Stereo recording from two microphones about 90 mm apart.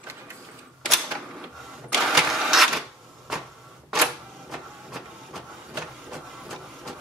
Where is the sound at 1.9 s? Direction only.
5° right (ahead or behind).